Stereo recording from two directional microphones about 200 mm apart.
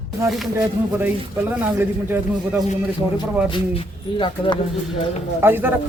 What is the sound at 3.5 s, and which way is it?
Speech, 25° left (ahead or behind).